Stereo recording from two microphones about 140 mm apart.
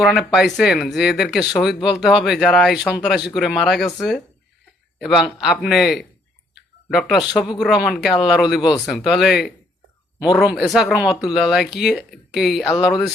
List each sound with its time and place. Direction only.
0.0 s speech: 5° right (ahead or behind)
6.5 s a sound: centre (ahead or behind)
7.6 s speech: 5° right (ahead or behind)